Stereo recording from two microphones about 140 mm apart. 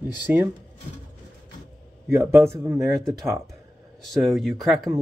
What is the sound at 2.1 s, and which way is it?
Speech, 20° right (ahead or behind).